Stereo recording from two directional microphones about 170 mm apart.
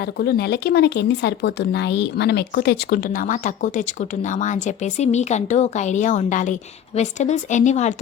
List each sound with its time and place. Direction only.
0.2 s speech: 75° left (ahead or behind); by 7.9 s 45° left (ahead or behind)